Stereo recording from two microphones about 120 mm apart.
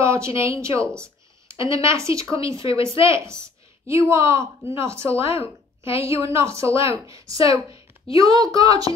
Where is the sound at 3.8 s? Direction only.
25° right (ahead or behind).